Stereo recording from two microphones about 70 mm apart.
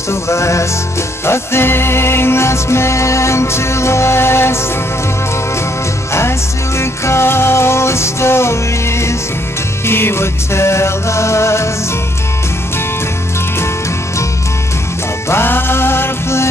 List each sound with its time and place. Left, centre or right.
0.1 s music: left
6.8 s music: left
15.2 s music: left